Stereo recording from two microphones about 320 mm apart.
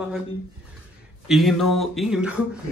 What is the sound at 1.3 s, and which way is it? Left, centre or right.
Speech, centre.